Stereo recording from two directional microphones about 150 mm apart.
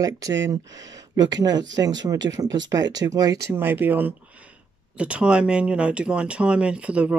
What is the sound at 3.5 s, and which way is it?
Speech, 15° right (ahead or behind).